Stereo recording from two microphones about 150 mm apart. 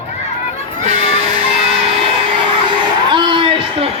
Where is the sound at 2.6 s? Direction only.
30° right (ahead or behind).